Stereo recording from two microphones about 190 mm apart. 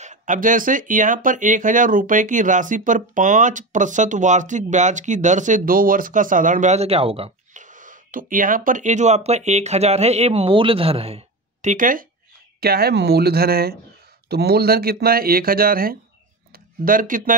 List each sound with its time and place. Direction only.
0.0 s speech: 40° right (ahead or behind)